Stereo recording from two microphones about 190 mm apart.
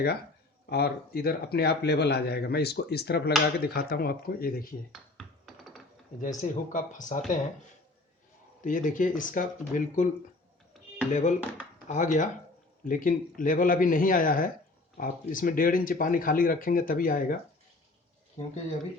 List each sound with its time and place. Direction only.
0.7 s speech: 55° left (ahead or behind)
4.9 s a sound: centre (ahead or behind)
6.2 s speech: 40° left (ahead or behind)
8.6 s speech: 45° left (ahead or behind)
11.1 s speech: 40° left (ahead or behind)